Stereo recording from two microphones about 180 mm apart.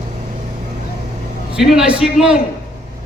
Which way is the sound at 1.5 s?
Centre (ahead or behind).